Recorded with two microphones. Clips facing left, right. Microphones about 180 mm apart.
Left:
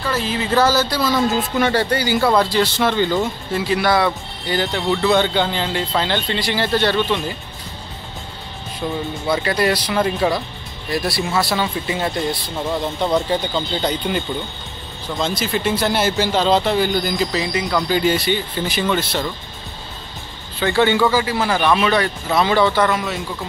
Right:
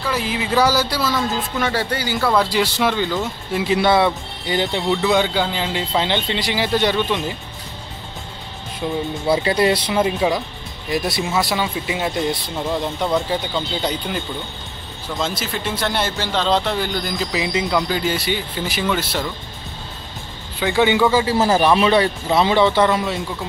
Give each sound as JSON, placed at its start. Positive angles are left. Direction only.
{"t": 0.1, "sound": "speech", "side_deg": -15}
{"t": 3.5, "sound": "speech", "side_deg": -20}
{"t": 8.8, "sound": "speech", "side_deg": -10}
{"t": 9.3, "sound": "a man's voice", "side_deg": -25}
{"t": 10.0, "sound": "speech", "side_deg": -15}
{"t": 12.6, "sound": "speech", "side_deg": 0}
{"t": 17.3, "sound": "speech", "side_deg": -20}
{"t": 17.8, "sound": "speech", "side_deg": 0}
{"t": 20.5, "sound": "speech", "side_deg": -15}
{"t": 21.4, "sound": "a man's voice", "side_deg": -35}